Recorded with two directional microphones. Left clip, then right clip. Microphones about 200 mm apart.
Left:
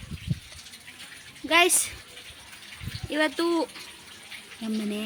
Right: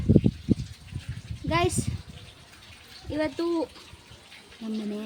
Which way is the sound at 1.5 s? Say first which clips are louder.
Left 5 dB; 5° left (ahead or behind).